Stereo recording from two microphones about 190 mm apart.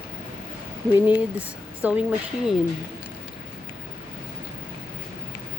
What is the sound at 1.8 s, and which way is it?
Speech, 10° right (ahead or behind).